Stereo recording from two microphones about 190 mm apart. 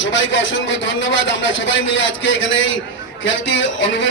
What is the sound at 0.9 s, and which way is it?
A man's voice, 80° left.